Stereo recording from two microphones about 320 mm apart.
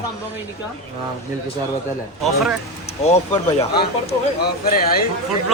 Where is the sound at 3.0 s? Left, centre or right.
Centre.